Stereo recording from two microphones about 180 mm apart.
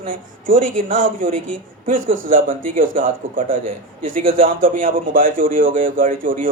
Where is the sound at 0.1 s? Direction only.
50° right (ahead or behind).